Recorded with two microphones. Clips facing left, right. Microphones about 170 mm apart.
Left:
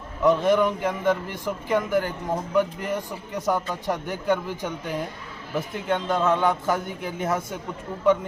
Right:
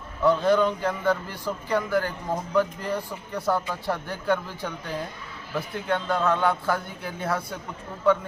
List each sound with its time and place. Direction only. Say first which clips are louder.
0.2 s a man's voice: left 1 dB; 20° left (ahead or behind)